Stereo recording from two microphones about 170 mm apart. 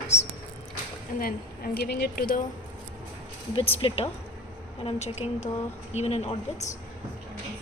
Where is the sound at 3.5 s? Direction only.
30° left (ahead or behind).